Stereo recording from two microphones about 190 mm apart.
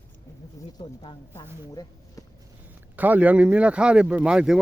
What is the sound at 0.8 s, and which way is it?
Speech, 20° left (ahead or behind).